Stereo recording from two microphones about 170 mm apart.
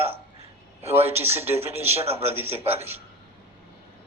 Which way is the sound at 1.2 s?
15° right (ahead or behind).